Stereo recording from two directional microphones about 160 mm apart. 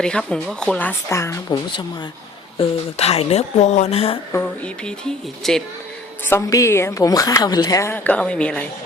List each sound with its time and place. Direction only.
0.0 s speech: 5° left (ahead or behind)
2.6 s speech: 40° left (ahead or behind)
4.3 s speech: 10° left (ahead or behind)
6.2 s a woman's voice: 15° left (ahead or behind)